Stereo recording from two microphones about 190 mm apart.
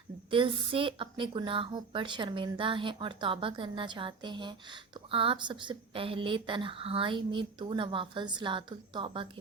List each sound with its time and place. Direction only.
0.3 s a woman's voice: 25° right (ahead or behind)